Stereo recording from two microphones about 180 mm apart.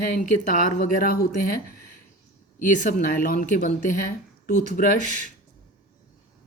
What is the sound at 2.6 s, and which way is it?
Speech, 45° left (ahead or behind).